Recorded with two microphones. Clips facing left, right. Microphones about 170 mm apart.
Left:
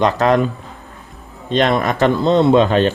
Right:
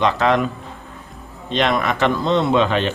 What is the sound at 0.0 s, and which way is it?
Speech, 40° left (ahead or behind).